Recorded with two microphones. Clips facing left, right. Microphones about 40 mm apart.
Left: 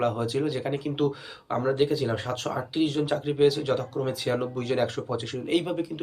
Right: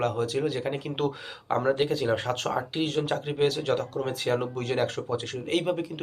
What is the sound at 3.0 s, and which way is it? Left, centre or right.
Speech, centre.